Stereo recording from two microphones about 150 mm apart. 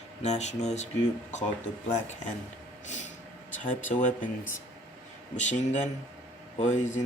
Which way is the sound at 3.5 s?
55° left (ahead or behind).